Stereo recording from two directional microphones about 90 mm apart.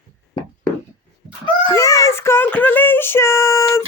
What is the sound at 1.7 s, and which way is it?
Speech, 35° left (ahead or behind).